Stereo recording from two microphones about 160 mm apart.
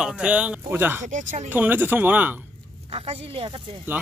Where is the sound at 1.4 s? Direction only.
10° right (ahead or behind).